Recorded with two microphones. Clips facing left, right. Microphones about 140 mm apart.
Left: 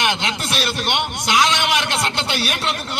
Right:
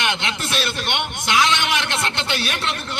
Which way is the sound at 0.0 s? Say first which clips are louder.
Left 2 dB; 20° left (ahead or behind).